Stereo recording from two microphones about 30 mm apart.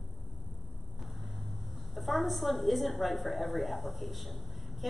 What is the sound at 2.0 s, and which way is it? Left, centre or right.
A woman's voice, centre.